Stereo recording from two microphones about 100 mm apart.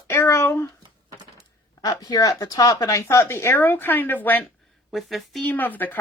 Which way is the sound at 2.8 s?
30° left (ahead or behind).